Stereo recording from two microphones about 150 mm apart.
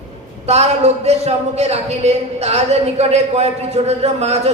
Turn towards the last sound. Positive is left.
turn(degrees=-45)  # may be behind; listen again after turning